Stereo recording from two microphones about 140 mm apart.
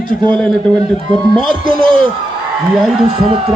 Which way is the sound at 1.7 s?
35° right (ahead or behind).